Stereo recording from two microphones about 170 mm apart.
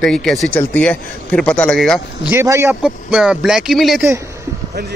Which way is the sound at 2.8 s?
5° right (ahead or behind).